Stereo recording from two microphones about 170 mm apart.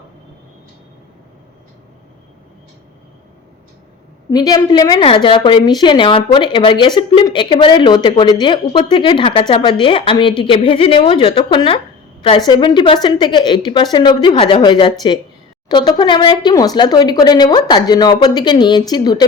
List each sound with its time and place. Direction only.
4.3 s a woman's voice: 20° left (ahead or behind)